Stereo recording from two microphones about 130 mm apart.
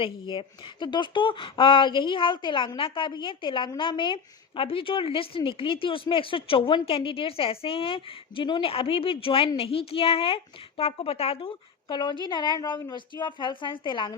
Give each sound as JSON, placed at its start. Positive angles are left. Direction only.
{"t": 0.0, "sound": "speech", "side_deg": 40}